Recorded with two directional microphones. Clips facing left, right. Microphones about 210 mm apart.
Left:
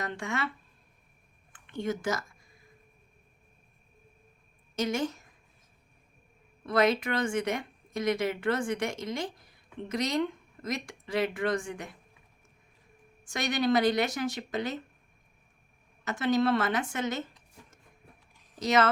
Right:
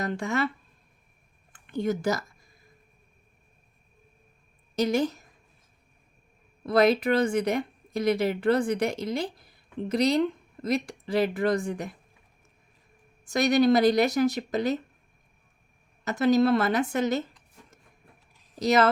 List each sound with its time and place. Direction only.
0.0 s speech: 40° right (ahead or behind)
1.5 s speech: 40° right (ahead or behind)
4.7 s a woman's voice: 35° right (ahead or behind)
6.7 s speech: 35° right (ahead or behind)
13.2 s speech: 40° right (ahead or behind)
16.0 s speech: 40° right (ahead or behind)
18.6 s speech: 35° right (ahead or behind)